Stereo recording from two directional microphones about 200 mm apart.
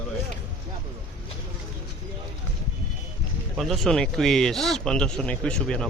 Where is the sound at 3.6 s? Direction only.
Centre (ahead or behind).